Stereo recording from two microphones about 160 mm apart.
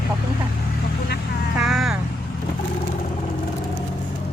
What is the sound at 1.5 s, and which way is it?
Vehicle, centre (ahead or behind).